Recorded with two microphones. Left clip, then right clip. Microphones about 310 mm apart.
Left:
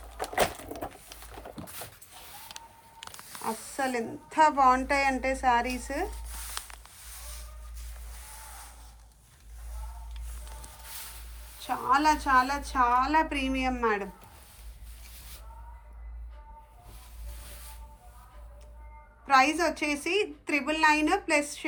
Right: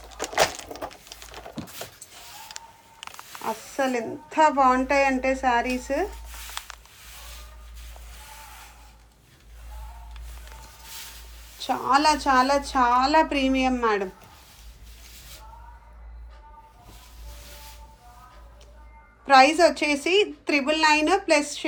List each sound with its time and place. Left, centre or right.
3.0 s speech: centre
11.6 s a woman's voice: centre
19.2 s a woman's voice: centre